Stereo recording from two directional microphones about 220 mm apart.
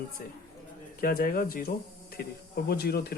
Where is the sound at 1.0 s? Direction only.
40° left (ahead or behind).